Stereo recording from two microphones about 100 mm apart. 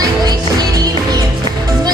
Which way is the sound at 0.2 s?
40° right (ahead or behind).